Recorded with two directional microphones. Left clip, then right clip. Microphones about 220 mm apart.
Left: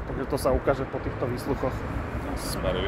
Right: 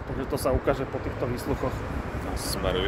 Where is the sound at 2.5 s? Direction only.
45° right (ahead or behind).